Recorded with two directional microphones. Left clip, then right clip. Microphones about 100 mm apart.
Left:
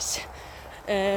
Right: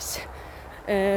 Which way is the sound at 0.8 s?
50° right (ahead or behind).